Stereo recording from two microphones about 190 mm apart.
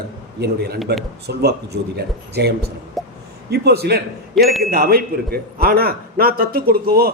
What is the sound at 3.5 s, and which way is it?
Speech, 55° right (ahead or behind).